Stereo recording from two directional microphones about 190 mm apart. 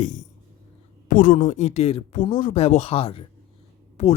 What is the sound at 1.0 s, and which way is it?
Speech, 45° left (ahead or behind).